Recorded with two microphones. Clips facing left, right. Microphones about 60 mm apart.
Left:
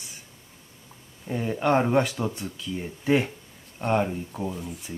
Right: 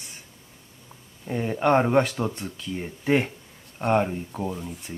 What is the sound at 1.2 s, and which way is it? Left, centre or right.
Speech, centre.